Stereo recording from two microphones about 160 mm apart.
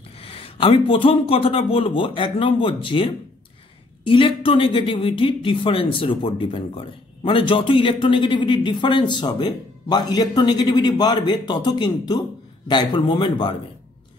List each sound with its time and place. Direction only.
0.2 s a man's voice: 35° left (ahead or behind)